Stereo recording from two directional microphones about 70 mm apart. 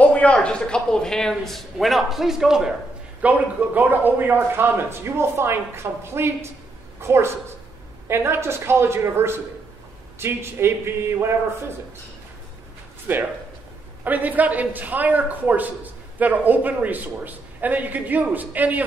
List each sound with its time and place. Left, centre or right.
0.0 s a man's voice: centre
3.2 s a man's voice: right
13.1 s a man's voice: right